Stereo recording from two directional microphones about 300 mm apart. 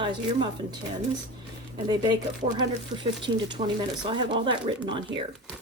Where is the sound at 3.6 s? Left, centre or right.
Right.